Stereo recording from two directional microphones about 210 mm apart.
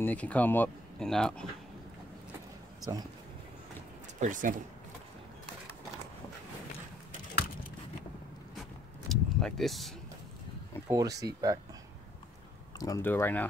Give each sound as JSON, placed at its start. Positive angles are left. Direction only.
{"t": 0.0, "sound": "speech", "side_deg": 5}
{"t": 4.2, "sound": "speech", "side_deg": -40}
{"t": 9.1, "sound": "a sound", "side_deg": 0}
{"t": 10.9, "sound": "speech", "side_deg": -15}
{"t": 12.7, "sound": "speech", "side_deg": 15}